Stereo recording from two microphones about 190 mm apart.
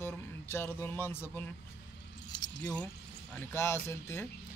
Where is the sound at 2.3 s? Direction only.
20° left (ahead or behind).